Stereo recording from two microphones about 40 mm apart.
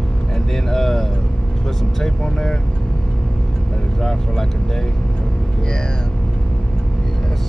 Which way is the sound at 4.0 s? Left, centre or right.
Centre.